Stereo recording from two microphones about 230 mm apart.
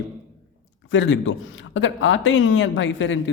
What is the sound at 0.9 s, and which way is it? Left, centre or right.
Speech, left.